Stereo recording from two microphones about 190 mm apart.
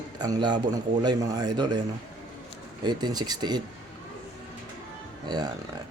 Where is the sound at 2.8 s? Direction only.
20° right (ahead or behind).